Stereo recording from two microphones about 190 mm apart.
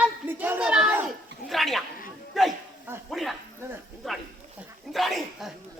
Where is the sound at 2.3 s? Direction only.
Centre (ahead or behind).